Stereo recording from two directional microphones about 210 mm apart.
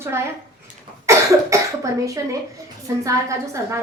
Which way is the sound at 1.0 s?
15° right (ahead or behind).